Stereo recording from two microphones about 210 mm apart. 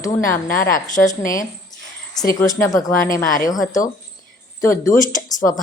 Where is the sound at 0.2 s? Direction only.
40° left (ahead or behind).